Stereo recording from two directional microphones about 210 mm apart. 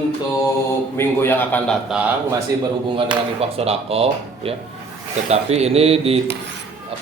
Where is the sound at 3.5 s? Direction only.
30° right (ahead or behind).